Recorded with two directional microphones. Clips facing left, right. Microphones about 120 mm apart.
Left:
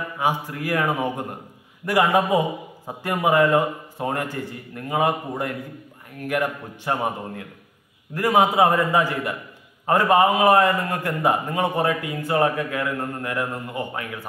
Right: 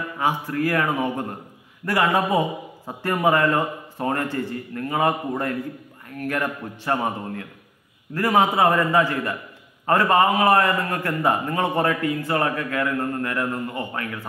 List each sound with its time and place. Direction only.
0.2 s a man's voice: 15° left (ahead or behind)